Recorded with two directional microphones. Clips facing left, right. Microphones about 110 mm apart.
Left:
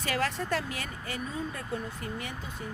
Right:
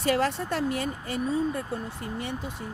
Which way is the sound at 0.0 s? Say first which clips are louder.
Right 6 dB; 30° right (ahead or behind).